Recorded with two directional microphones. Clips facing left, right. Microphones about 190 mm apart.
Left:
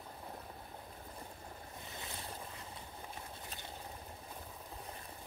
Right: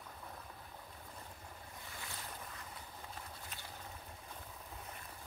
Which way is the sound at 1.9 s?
20° left (ahead or behind).